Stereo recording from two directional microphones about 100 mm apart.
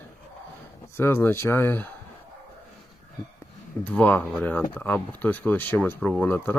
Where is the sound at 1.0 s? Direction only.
25° left (ahead or behind).